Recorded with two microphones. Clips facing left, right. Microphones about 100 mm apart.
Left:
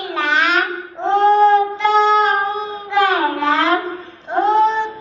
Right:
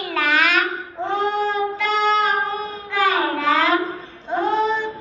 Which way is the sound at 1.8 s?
20° left (ahead or behind).